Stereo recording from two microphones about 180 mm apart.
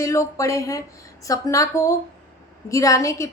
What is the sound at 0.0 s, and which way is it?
A woman's voice, 15° left (ahead or behind).